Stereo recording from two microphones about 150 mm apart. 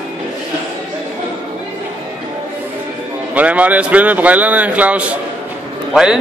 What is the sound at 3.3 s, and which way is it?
Speech, 10° right (ahead or behind).